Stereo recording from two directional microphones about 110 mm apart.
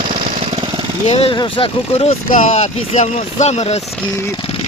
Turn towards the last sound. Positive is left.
turn(degrees=75)  # may be behind; listen again after turning